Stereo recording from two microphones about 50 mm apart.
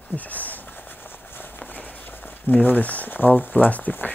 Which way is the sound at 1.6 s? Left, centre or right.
Left.